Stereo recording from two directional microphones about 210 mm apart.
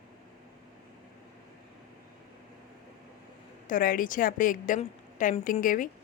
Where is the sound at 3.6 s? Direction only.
40° left (ahead or behind).